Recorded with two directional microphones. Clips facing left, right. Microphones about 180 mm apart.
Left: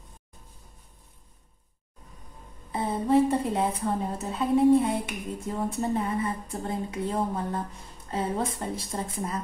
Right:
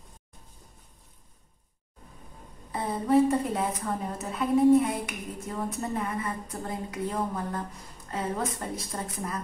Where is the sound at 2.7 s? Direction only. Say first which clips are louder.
Left 1 dB; 25° left (ahead or behind).